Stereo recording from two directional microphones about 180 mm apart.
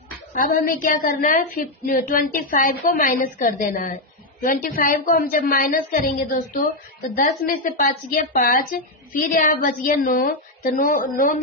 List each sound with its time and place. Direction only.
0.3 s a woman's voice: 50° left (ahead or behind)